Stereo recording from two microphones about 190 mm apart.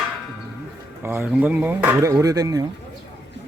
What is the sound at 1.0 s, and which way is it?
Speech, 10° right (ahead or behind).